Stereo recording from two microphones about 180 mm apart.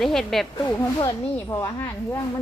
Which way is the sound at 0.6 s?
25° left (ahead or behind).